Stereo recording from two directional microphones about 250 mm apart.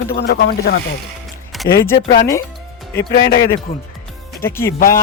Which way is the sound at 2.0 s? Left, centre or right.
Left.